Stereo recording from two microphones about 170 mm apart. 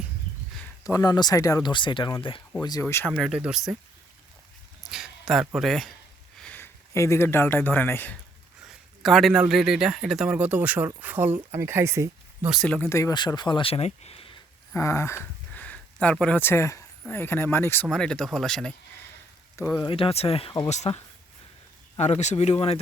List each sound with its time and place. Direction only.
0.6 s speech: 20° left (ahead or behind)
3.1 s speech: 5° right (ahead or behind)
4.8 s speech: centre (ahead or behind)
8.6 s a man's voice: centre (ahead or behind); by 12.5 s 15° right (ahead or behind)
12.5 s speech: 5° left (ahead or behind); by 14.3 s 35° left (ahead or behind)
14.7 s speech: 15° left (ahead or behind)
19.5 s speech: 20° left (ahead or behind)
20.7 s speech: 40° left (ahead or behind)